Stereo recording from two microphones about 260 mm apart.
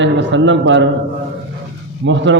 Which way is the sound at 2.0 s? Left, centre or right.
Right.